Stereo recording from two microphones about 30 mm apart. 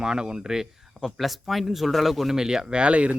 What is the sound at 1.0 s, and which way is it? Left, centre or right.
Speech, centre.